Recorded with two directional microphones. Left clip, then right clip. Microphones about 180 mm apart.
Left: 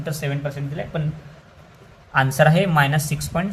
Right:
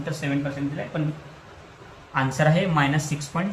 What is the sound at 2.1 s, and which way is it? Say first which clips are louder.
Speech: left 5 dB; 60° left (ahead or behind).